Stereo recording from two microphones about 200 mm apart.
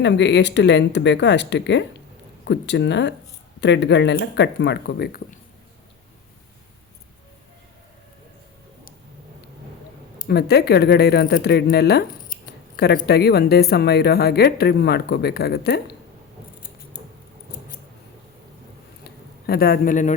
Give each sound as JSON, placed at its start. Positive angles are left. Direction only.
{"t": 0.0, "sound": "speech", "side_deg": 60}
{"t": 10.2, "sound": "speech", "side_deg": 55}
{"t": 19.5, "sound": "speech", "side_deg": 50}